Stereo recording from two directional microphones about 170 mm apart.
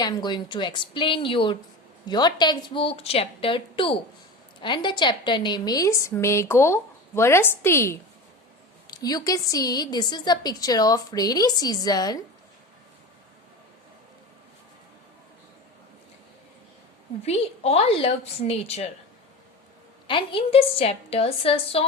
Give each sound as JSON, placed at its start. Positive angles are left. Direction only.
{"t": 0.0, "sound": "a woman's voice", "side_deg": 25}
{"t": 17.2, "sound": "a woman's voice", "side_deg": 35}
{"t": 20.1, "sound": "a woman's voice", "side_deg": 30}